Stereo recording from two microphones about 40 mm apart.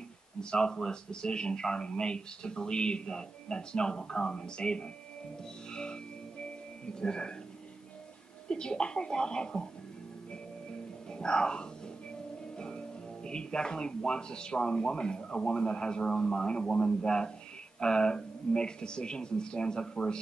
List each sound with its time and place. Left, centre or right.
0.4 s speech: left
5.7 s music: centre
7.0 s speech: left
8.5 s speech: left
11.1 s speech: left